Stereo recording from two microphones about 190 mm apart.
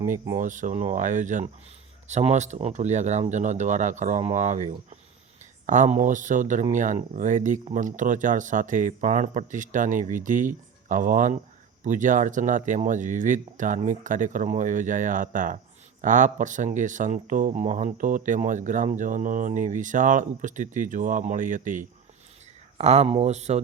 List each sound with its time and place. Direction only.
0.1 s speech: 40° right (ahead or behind)